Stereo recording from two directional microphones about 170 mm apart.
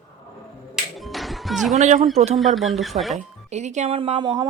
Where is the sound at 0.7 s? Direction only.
Centre (ahead or behind).